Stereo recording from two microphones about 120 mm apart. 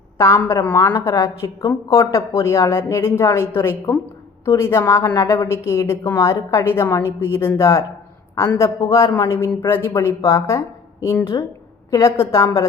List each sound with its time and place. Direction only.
0.2 s a woman's voice: 25° left (ahead or behind)
0.9 s a woman's voice: 35° left (ahead or behind)
11.3 s a woman's voice: 35° left (ahead or behind)